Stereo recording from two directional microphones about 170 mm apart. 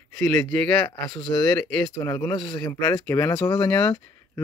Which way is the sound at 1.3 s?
15° left (ahead or behind).